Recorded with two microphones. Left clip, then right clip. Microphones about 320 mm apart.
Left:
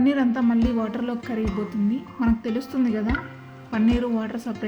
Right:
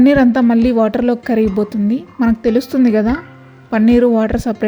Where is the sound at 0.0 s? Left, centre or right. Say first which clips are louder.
Right 11 dB; right.